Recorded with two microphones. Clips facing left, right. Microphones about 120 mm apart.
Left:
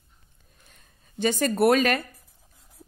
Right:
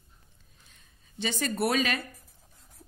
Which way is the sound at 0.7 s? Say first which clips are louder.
Left 3 dB; 50° left (ahead or behind).